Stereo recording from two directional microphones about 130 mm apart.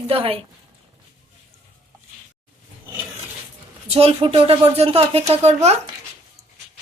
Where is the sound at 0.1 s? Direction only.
45° right (ahead or behind).